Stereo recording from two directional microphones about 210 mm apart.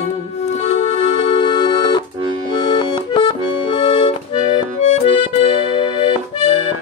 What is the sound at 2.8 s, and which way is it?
Accordion, 20° left (ahead or behind).